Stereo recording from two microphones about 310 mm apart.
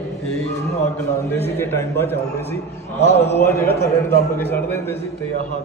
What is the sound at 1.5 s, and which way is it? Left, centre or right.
Speech, centre.